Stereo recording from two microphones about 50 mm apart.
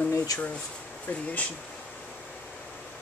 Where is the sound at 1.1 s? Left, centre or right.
Left.